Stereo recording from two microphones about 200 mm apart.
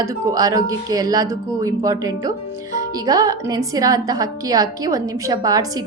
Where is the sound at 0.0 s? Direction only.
15° right (ahead or behind).